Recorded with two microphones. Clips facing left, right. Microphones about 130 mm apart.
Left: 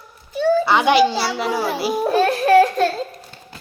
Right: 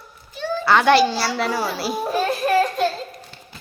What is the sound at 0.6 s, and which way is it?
A child's voice, 15° left (ahead or behind).